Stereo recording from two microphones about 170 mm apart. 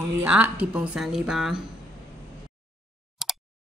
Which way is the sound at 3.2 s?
Centre (ahead or behind).